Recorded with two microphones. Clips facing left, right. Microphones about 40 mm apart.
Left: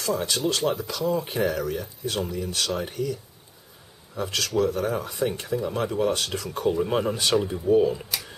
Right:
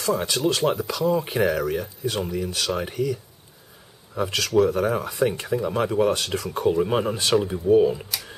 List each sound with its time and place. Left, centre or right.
0.0 s speech: centre